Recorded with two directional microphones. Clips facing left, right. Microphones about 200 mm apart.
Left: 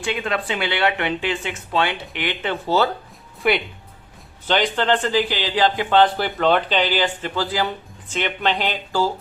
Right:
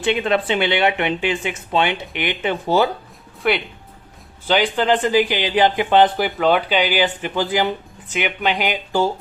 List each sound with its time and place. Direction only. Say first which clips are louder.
0.0 s speech: right 6 dB; 25° right (ahead or behind)
3.4 s a man's voice: even; centre (ahead or behind); by 9.0 s 15° right (ahead or behind)